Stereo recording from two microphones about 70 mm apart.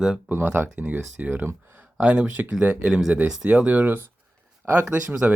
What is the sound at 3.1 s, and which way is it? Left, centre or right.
Speech, centre.